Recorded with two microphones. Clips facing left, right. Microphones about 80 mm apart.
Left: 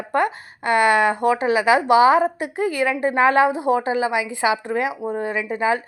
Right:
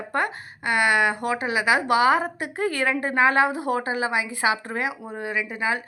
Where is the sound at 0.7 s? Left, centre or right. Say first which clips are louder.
Left 5 dB; centre.